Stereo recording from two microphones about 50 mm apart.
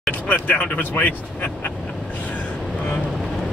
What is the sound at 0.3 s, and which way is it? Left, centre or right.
Speech, left.